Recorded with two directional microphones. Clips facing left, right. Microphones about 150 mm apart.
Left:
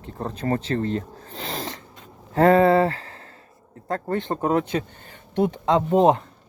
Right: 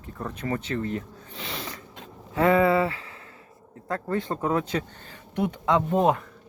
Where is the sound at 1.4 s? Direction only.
40° left (ahead or behind).